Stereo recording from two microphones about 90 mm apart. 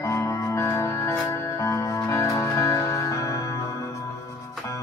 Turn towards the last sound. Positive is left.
turn(degrees=40)  # may be behind; listen again after turning